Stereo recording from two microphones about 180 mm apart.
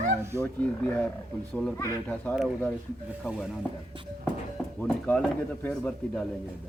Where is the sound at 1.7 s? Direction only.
15° left (ahead or behind).